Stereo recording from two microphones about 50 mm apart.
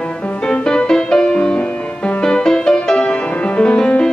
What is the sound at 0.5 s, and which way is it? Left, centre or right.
Music, centre.